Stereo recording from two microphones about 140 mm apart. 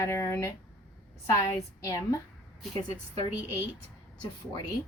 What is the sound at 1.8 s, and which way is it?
A woman's voice, 20° left (ahead or behind).